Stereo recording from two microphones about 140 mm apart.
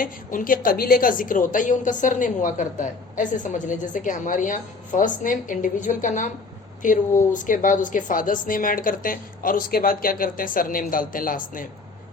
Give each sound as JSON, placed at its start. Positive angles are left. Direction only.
{"t": 0.0, "sound": "a woman's voice", "side_deg": 75}